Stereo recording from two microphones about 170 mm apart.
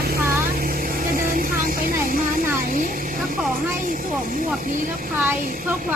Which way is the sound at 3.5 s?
55° right (ahead or behind).